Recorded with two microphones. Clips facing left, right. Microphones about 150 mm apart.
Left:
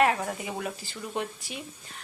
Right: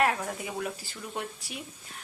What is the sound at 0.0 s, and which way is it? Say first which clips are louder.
Speech: left 3 dB; centre (ahead or behind).